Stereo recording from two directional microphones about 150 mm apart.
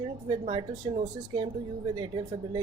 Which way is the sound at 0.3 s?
35° right (ahead or behind).